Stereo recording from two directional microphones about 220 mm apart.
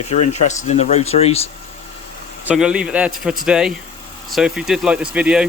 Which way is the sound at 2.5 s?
5° right (ahead or behind).